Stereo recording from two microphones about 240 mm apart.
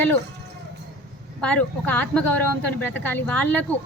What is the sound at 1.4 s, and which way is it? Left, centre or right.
A woman's voice, centre.